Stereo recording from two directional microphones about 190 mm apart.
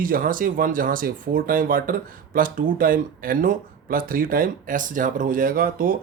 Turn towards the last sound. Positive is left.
turn(degrees=-50)  # may be behind; listen again after turning